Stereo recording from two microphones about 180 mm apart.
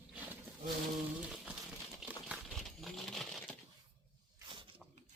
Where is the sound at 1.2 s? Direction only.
5° right (ahead or behind).